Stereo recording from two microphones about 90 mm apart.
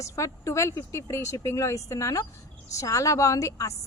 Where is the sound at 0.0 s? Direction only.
35° left (ahead or behind).